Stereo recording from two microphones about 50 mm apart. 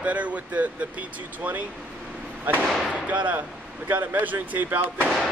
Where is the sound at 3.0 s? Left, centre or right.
Right.